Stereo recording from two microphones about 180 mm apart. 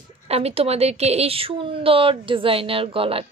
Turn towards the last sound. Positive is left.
turn(degrees=-30)  # may be behind; listen again after turning